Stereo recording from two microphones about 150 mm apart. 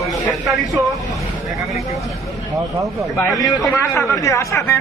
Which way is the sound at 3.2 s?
20° left (ahead or behind).